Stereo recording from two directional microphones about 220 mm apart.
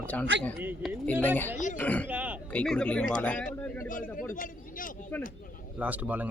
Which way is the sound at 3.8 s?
40° left (ahead or behind).